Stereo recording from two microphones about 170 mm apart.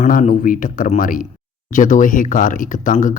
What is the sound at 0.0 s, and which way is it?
Speech, 50° left (ahead or behind).